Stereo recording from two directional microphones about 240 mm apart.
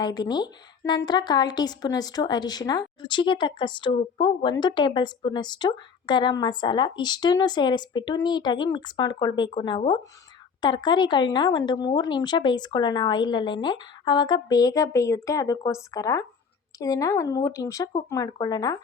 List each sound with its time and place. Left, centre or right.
0.0 s a woman's voice: centre